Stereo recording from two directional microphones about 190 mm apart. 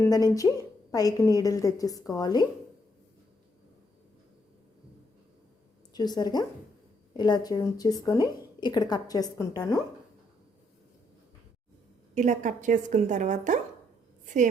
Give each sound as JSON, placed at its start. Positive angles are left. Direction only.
{"t": 0.3, "sound": "a woman's voice", "side_deg": 15}
{"t": 5.9, "sound": "a woman's voice", "side_deg": 20}
{"t": 12.1, "sound": "a woman's voice", "side_deg": -40}